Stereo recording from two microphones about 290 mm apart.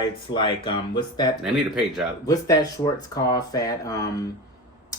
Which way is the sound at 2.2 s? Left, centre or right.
Centre.